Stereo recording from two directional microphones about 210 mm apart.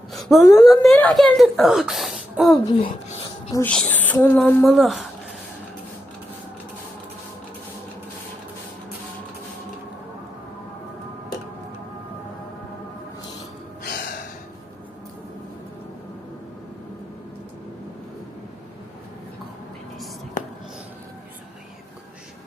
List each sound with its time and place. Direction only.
0.1 s a woman's voice: centre (ahead or behind)
13.8 s gasp: 55° left (ahead or behind)